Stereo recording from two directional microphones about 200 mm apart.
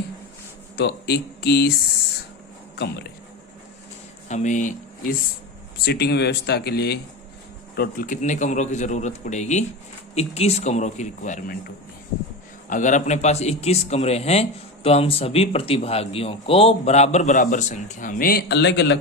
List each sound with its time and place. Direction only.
0.8 s speech: 55° left (ahead or behind)
2.7 s speech: 55° left (ahead or behind)
4.3 s speech: 40° left (ahead or behind)
5.8 s speech: 55° left (ahead or behind)
12.6 s speech: 40° left (ahead or behind); by 18.9 s 60° left (ahead or behind)